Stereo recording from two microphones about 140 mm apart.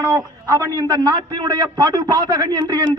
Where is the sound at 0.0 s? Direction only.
20° right (ahead or behind).